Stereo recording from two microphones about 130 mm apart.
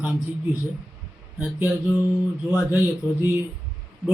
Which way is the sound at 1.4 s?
5° right (ahead or behind).